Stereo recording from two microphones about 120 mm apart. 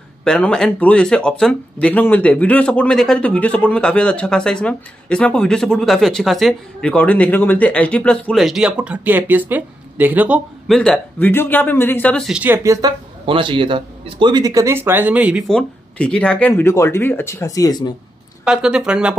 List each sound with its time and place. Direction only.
0.2 s speech: 5° left (ahead or behind); by 10.4 s 10° right (ahead or behind)
10.7 s speech: 5° left (ahead or behind)
12.2 s speech: 5° right (ahead or behind)
12.4 s speech: 25° right (ahead or behind)
13.2 s a man's voice: 45° right (ahead or behind)
14.3 s speech: 30° right (ahead or behind); by 15.4 s 10° right (ahead or behind)
15.4 s speech: 5° left (ahead or behind); by 17.9 s 35° left (ahead or behind)
18.4 s speech: 5° right (ahead or behind)